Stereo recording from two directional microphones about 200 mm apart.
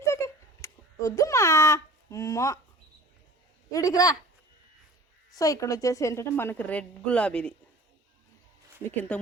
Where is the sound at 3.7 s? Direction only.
15° left (ahead or behind).